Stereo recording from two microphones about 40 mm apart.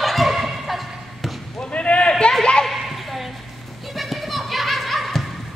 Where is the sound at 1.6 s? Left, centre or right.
Left.